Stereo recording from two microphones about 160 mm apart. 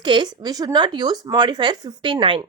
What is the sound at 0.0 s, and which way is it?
Speech, 30° right (ahead or behind).